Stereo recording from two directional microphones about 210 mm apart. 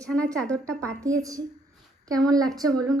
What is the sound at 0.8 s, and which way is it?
A woman's voice, 15° right (ahead or behind).